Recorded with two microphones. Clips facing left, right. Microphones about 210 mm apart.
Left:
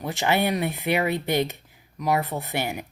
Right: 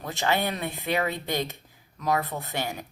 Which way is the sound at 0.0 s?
15° left (ahead or behind).